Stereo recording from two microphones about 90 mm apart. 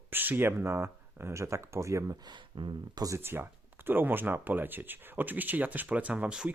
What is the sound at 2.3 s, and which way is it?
Speech, 55° right (ahead or behind).